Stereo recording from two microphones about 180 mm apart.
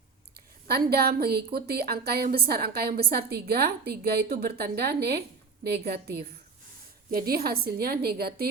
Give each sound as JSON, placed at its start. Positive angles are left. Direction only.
{"t": 0.7, "sound": "a woman's voice", "side_deg": -60}